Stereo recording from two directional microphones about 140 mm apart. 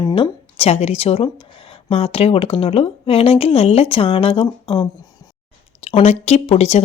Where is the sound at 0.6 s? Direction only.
50° left (ahead or behind).